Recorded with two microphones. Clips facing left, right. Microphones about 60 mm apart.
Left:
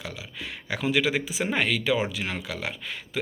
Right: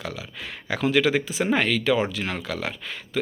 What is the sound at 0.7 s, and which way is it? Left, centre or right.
Speech, centre.